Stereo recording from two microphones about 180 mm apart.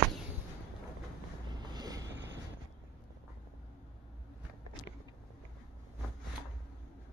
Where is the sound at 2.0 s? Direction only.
80° right.